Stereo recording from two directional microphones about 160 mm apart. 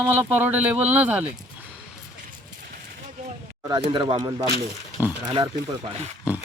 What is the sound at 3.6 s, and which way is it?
Speech, 30° right (ahead or behind).